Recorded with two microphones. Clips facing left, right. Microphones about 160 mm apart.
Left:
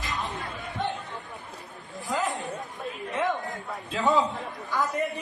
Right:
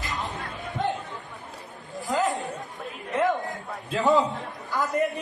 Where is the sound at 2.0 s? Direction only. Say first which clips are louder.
Right 4 dB; centre (ahead or behind).